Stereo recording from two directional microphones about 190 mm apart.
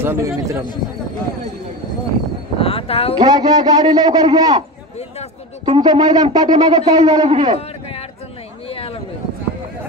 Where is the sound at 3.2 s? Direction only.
20° right (ahead or behind).